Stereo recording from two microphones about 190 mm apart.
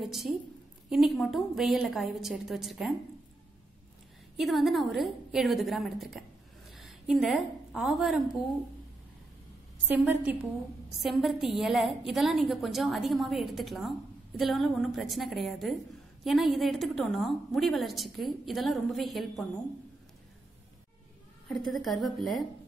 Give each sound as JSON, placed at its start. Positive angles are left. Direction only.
{"t": 0.0, "sound": "a woman's voice", "side_deg": 0}
{"t": 4.4, "sound": "a woman's voice", "side_deg": 0}
{"t": 9.8, "sound": "a woman's voice", "side_deg": -10}
{"t": 21.8, "sound": "a woman's voice", "side_deg": 0}